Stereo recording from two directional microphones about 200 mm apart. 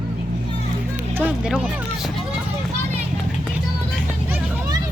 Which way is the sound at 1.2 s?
5° right (ahead or behind).